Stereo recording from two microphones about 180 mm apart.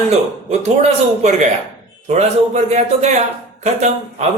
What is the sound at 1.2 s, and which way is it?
Speech, 40° right (ahead or behind).